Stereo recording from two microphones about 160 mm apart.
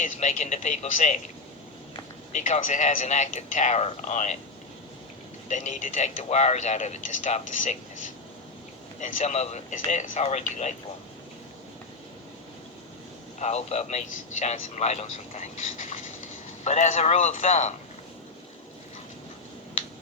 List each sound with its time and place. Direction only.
0.0 s speech: 45° left (ahead or behind)
2.3 s speech: 50° left (ahead or behind)
5.5 s speech: 50° left (ahead or behind)
9.0 s speech: 50° left (ahead or behind)
13.4 s speech: 40° left (ahead or behind)